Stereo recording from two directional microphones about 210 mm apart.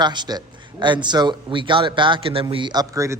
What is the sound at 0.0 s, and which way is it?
Speech, 20° right (ahead or behind).